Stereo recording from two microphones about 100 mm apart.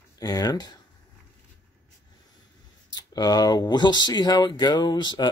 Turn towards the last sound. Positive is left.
turn(degrees=45)  # may be behind; listen again after turning